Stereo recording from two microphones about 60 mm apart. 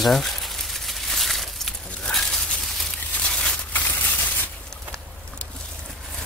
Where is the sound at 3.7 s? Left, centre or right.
Left.